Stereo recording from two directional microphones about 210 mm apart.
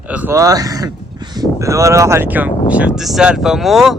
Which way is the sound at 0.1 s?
10° right (ahead or behind).